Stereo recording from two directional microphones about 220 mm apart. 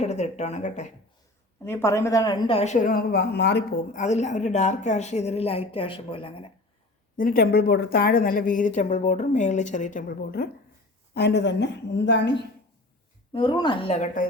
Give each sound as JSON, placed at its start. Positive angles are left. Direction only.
{"t": 0.0, "sound": "a woman's voice", "side_deg": 30}
{"t": 1.6, "sound": "a woman's voice", "side_deg": 10}
{"t": 3.9, "sound": "a woman's voice", "side_deg": 30}
{"t": 7.2, "sound": "a woman's voice", "side_deg": 40}
{"t": 13.3, "sound": "a woman's voice", "side_deg": 20}